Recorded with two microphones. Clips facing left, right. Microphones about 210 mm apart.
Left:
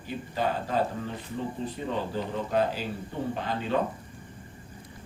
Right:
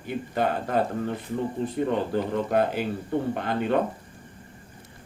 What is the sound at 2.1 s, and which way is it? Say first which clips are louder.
Speech: right 2 dB; 60° right (ahead or behind).